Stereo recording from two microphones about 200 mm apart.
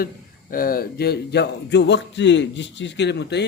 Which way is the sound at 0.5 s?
45° left (ahead or behind).